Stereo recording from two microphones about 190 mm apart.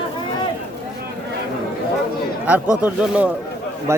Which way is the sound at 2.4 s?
5° right (ahead or behind).